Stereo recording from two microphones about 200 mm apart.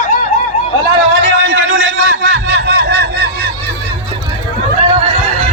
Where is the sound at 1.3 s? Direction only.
75° right (ahead or behind).